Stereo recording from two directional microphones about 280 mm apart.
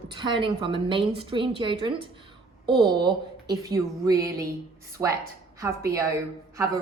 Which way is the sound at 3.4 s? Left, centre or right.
Centre.